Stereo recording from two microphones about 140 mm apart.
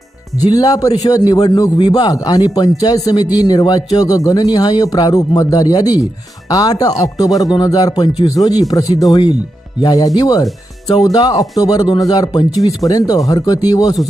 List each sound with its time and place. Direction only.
0.3 s speech: 25° left (ahead or behind)